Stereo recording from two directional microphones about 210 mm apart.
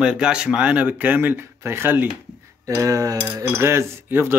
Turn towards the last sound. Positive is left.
turn(degrees=-10)  # may be behind; listen again after turning